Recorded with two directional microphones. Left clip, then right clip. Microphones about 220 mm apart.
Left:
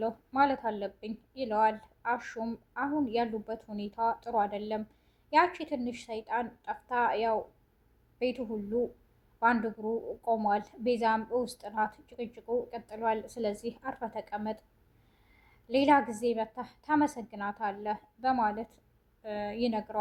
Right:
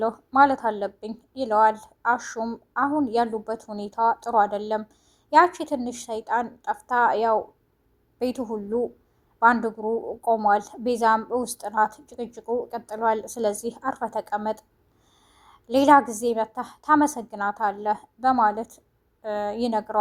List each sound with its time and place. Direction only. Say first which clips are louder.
0.0 s a woman's voice: right 9 dB; 20° right (ahead or behind)